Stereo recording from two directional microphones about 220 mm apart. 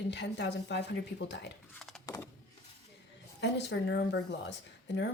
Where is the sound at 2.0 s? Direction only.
15° left (ahead or behind).